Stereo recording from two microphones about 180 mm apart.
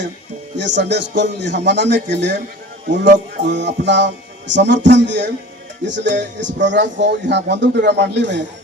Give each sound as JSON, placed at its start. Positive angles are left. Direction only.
{"t": 0.5, "sound": "speech", "side_deg": -80}